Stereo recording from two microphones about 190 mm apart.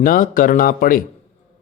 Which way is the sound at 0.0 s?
45° left (ahead or behind).